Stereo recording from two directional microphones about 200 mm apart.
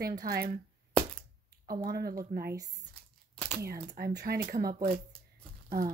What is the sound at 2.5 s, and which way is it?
Speech, 15° right (ahead or behind).